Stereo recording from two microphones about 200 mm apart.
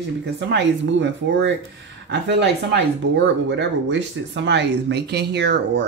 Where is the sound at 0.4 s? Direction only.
60° right (ahead or behind).